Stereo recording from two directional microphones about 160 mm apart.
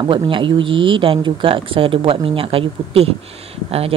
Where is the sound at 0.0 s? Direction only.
30° right (ahead or behind).